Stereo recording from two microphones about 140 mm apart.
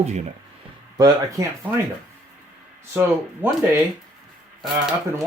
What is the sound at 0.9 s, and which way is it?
Speech, 25° right (ahead or behind).